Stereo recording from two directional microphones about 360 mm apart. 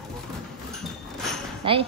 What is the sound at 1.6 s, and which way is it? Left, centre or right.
Speech, centre.